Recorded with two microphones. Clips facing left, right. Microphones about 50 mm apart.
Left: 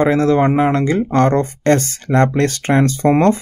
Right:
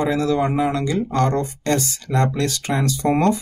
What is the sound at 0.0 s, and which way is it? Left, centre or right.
Speech, left.